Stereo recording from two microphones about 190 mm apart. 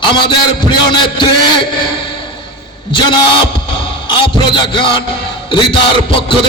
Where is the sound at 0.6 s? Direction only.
25° left (ahead or behind).